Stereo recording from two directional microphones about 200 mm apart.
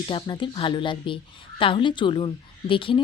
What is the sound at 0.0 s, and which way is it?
A woman's voice, 25° left (ahead or behind).